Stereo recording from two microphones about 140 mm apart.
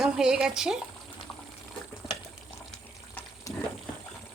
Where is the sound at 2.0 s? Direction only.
35° left (ahead or behind).